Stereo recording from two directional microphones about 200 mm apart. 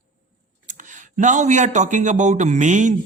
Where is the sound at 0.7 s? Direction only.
40° right (ahead or behind).